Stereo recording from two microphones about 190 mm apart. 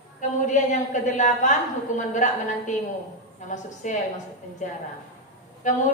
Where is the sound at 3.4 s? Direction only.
40° left (ahead or behind).